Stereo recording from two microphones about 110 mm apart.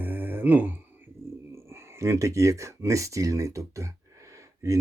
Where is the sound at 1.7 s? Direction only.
25° right (ahead or behind).